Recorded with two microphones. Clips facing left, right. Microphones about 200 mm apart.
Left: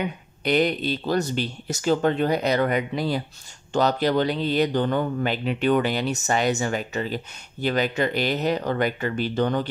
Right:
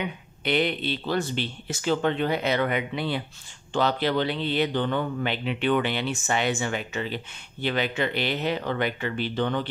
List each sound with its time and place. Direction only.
0.4 s speech: 40° left (ahead or behind)